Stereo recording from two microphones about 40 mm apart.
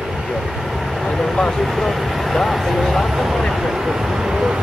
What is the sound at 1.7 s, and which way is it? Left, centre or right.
Vehicle, centre.